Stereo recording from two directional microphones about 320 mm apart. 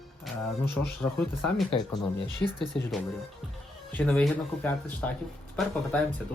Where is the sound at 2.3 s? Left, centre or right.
Centre.